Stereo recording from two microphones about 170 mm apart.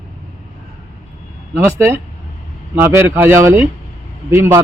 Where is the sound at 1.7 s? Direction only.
15° right (ahead or behind).